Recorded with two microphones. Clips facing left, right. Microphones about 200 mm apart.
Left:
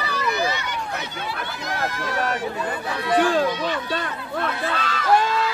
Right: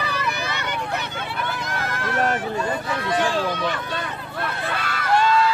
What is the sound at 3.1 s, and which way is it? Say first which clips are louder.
Speech: left 4 dB; 55° left (ahead or behind).